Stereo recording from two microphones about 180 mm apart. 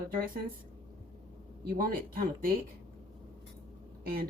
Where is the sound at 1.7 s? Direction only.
50° right (ahead or behind).